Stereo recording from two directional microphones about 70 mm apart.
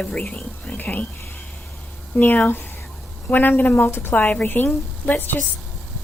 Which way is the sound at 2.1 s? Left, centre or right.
Left.